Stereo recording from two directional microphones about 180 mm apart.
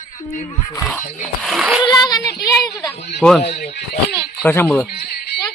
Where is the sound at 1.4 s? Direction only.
Centre (ahead or behind).